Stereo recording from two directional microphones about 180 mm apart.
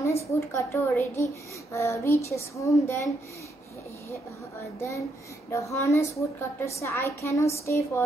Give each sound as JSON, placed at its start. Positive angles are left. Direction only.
{"t": 0.0, "sound": "a woman's voice", "side_deg": 15}
{"t": 5.5, "sound": "a woman's voice", "side_deg": 15}